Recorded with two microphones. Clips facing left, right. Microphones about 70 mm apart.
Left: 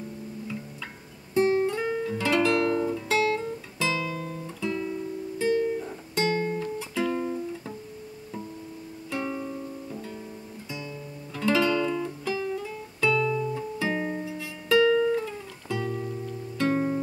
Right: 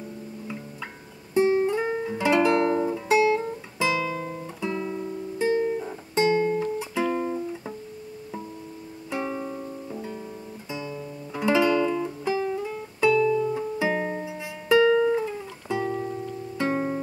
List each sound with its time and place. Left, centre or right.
1.3 s music: centre
9.1 s music: centre